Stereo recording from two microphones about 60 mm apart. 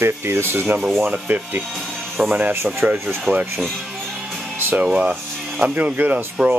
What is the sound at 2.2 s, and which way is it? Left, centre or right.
Speech, centre.